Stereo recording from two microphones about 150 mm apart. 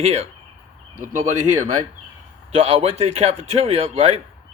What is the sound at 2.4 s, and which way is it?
A man's voice, 40° right (ahead or behind).